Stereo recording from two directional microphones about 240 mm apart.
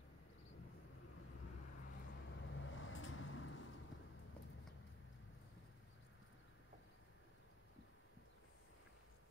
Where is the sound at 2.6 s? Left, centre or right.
Left.